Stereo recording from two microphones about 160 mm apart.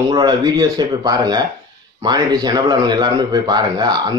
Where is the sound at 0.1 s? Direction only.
25° right (ahead or behind).